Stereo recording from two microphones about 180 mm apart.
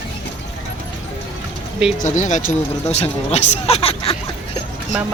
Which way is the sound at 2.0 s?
45° left (ahead or behind).